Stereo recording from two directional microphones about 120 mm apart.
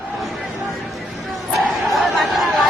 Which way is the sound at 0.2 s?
Centre (ahead or behind).